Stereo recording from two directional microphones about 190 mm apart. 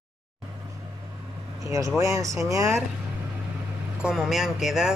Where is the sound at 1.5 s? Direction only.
15° right (ahead or behind).